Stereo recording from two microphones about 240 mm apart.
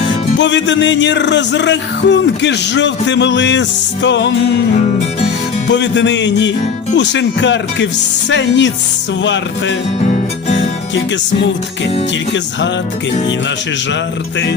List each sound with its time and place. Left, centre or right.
0.3 s music: left
5.7 s music: left